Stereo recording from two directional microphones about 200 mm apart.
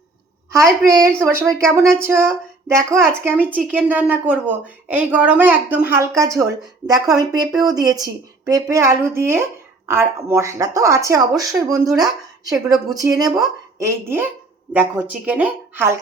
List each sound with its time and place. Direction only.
0.9 s a woman's voice: 15° right (ahead or behind)